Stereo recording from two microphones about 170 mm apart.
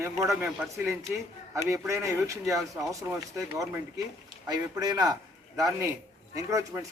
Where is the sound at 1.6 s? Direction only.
15° right (ahead or behind).